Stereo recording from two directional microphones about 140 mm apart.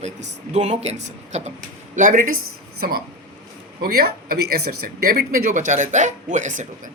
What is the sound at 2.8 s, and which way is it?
Speech, 90° right.